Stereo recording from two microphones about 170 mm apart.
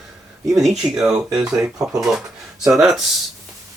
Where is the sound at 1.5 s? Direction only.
20° right (ahead or behind).